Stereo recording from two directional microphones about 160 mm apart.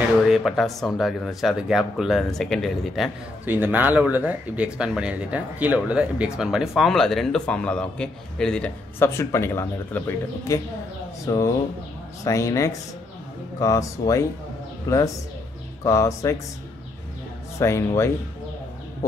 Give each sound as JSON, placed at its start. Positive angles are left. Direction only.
{"t": 0.3, "sound": "speech", "side_deg": 0}
{"t": 3.4, "sound": "speech", "side_deg": -10}
{"t": 17.6, "sound": "speech", "side_deg": 15}